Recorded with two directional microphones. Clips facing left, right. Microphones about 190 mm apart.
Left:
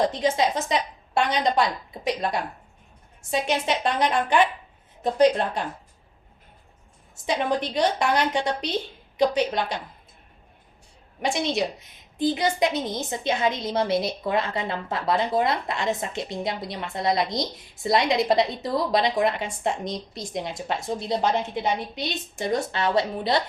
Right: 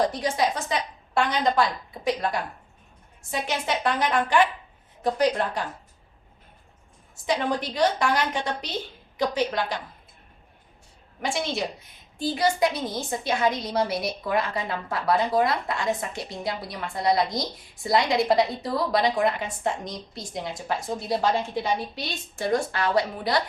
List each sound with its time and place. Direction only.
0.1 s a woman's voice: 20° left (ahead or behind)
7.3 s a woman's voice: 20° left (ahead or behind)
11.2 s a woman's voice: 20° left (ahead or behind)